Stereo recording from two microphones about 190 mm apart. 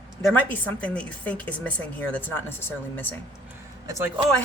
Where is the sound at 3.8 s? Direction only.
15° right (ahead or behind).